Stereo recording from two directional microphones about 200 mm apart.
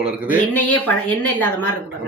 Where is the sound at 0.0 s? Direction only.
5° right (ahead or behind).